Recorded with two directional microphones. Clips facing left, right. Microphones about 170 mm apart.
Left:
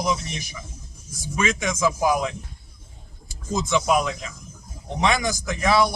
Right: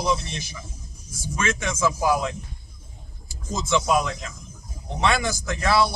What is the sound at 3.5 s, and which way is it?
A man's voice, 15° left (ahead or behind).